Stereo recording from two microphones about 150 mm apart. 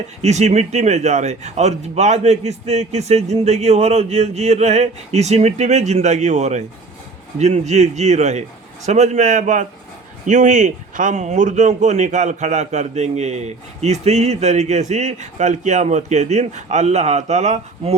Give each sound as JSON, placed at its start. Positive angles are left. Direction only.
{"t": 0.2, "sound": "speech", "side_deg": -50}